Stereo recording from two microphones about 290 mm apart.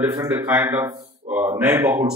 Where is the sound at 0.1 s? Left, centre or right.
Centre.